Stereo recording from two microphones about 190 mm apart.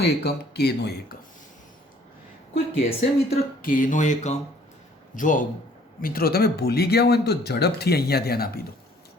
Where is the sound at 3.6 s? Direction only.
45° left (ahead or behind).